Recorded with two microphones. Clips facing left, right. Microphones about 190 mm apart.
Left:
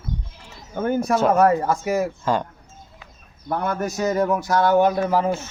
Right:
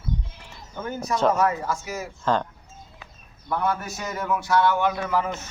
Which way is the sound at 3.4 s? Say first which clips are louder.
Left 2 dB; 45° left (ahead or behind).